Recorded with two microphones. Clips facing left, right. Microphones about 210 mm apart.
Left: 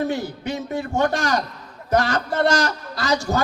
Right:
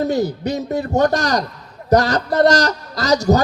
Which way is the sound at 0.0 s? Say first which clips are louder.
Right 6 dB; 40° right (ahead or behind).